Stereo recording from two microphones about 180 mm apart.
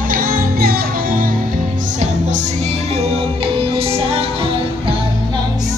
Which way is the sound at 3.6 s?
30° right (ahead or behind).